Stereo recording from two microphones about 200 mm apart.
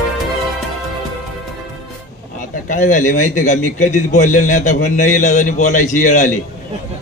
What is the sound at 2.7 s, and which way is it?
A man's voice, 40° left (ahead or behind).